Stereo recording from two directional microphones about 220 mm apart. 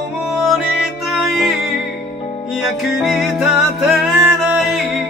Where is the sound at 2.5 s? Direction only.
Centre (ahead or behind).